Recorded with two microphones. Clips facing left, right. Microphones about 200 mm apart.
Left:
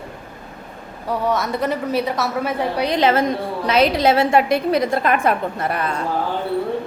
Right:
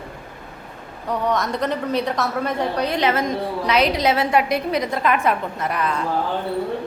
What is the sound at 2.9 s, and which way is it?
A woman's voice, 30° left (ahead or behind).